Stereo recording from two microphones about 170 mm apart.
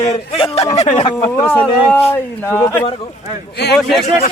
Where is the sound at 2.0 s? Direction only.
15° left (ahead or behind).